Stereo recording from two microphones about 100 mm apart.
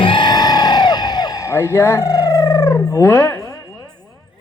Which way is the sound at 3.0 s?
30° left (ahead or behind).